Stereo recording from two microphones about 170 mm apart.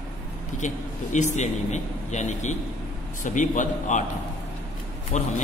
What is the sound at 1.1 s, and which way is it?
A man's voice, 45° left (ahead or behind).